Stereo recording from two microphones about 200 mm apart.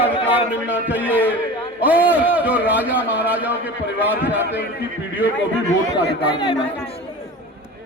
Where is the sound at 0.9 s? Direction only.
10° right (ahead or behind).